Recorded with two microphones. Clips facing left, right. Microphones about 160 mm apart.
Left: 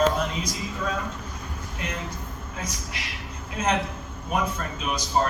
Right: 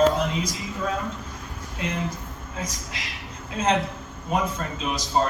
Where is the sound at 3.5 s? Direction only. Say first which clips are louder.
Right 2 dB; 25° right (ahead or behind).